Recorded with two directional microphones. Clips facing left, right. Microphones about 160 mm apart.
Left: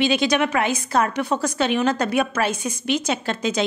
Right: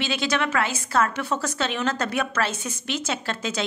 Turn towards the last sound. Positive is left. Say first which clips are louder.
# left 5 dB
turn(degrees=15)  # may be behind; listen again after turning